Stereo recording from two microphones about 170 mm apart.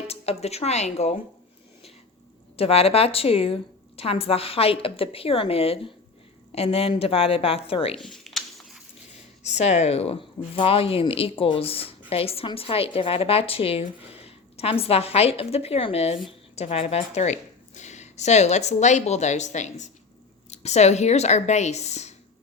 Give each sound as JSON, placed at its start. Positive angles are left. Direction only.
{"t": 0.1, "sound": "speech", "side_deg": 40}
{"t": 2.6, "sound": "speech", "side_deg": 35}
{"t": 8.0, "sound": "a sound", "side_deg": 0}
{"t": 9.4, "sound": "a woman's voice", "side_deg": 40}